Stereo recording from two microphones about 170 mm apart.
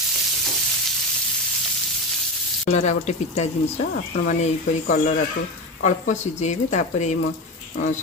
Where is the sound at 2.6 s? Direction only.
40° left (ahead or behind).